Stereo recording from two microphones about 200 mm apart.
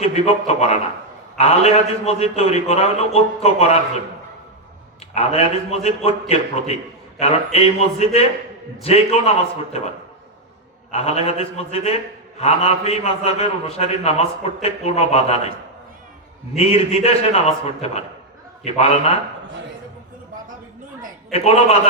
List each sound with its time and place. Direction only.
0.0 s a man's voice: 30° left (ahead or behind)
5.1 s a man's voice: 30° left (ahead or behind)
10.9 s a man's voice: 30° left (ahead or behind)
16.6 s a man's voice: 30° left (ahead or behind)
21.3 s a man's voice: 30° left (ahead or behind)